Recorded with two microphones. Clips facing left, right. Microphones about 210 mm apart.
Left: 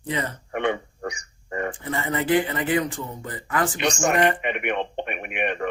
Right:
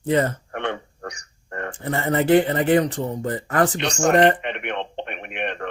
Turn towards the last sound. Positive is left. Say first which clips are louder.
# left 2 dB
turn(degrees=10)  # may be behind; listen again after turning